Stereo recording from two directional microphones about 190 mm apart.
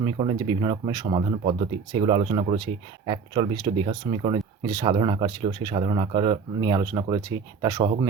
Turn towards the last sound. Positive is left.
turn(degrees=-20)  # may be behind; listen again after turning